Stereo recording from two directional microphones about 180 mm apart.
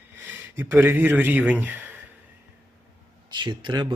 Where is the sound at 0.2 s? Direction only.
10° right (ahead or behind).